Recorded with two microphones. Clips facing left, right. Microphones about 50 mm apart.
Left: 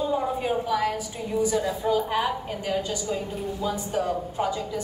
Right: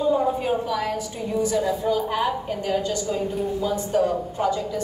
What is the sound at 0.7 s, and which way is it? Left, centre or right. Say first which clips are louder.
A woman's voice: even; centre.